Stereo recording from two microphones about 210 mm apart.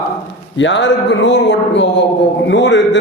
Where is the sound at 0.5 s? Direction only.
60° left (ahead or behind).